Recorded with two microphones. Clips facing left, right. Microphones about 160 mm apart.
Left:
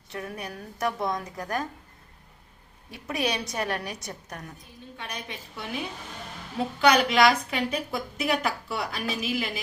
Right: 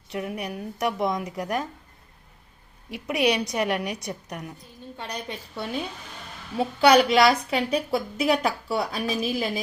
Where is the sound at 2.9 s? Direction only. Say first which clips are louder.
Right 6 dB; 20° right (ahead or behind).